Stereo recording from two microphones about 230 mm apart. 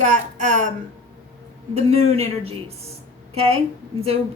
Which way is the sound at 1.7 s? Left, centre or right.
Right.